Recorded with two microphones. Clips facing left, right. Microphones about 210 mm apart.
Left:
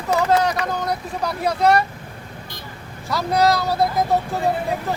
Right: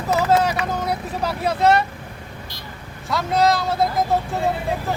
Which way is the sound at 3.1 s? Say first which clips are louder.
Even; centre (ahead or behind).